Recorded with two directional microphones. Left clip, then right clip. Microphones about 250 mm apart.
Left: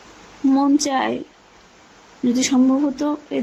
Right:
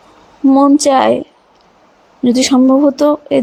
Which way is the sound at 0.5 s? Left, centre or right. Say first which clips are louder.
Right 10 dB; right.